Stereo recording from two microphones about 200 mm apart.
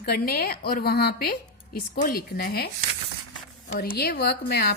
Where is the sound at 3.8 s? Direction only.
50° left (ahead or behind).